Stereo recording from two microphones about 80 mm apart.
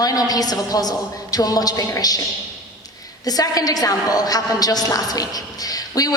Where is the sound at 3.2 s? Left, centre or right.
Left.